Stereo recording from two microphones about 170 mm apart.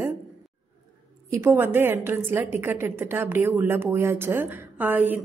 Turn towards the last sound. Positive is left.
turn(degrees=-10)  # may be behind; listen again after turning